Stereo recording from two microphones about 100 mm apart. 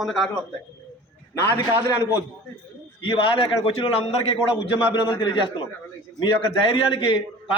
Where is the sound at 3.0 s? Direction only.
65° left (ahead or behind).